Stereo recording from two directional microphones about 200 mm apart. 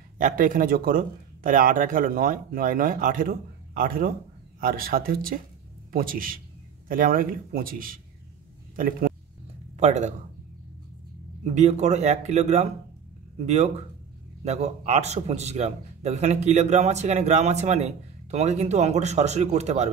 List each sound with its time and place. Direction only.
0.2 s a man's voice: 40° right (ahead or behind)
11.4 s a man's voice: 35° right (ahead or behind)
14.4 s a man's voice: 35° right (ahead or behind)